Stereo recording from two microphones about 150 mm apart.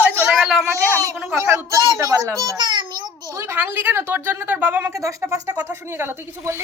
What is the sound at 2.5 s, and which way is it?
Speech, 30° right (ahead or behind).